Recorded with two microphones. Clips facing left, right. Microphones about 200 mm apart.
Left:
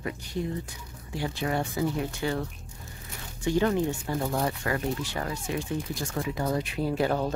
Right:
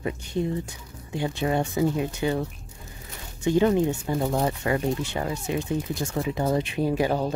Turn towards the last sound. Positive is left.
turn(degrees=-15)  # may be behind; listen again after turning